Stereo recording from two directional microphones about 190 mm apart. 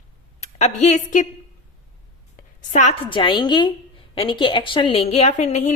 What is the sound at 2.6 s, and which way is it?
Speech, 40° left (ahead or behind).